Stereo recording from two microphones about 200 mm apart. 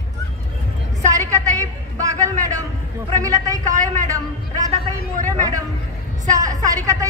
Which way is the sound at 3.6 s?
35° right (ahead or behind).